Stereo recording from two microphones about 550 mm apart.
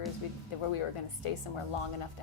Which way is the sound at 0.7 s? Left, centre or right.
Left.